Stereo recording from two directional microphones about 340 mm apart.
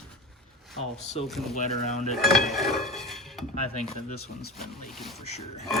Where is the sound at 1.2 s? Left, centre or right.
Centre.